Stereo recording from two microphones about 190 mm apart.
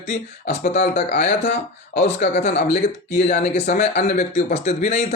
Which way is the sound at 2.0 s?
50° left (ahead or behind).